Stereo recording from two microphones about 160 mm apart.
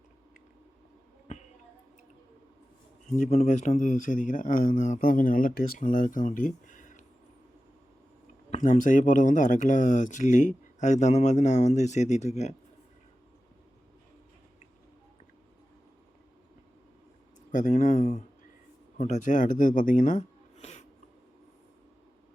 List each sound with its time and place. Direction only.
3.2 s speech: 45° left (ahead or behind)
8.4 s speech: 45° left (ahead or behind)
17.5 s speech: 50° left (ahead or behind)